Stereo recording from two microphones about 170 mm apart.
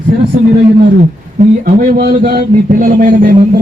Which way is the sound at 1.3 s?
55° right (ahead or behind).